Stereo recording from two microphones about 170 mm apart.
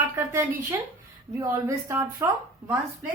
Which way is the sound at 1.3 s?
15° right (ahead or behind).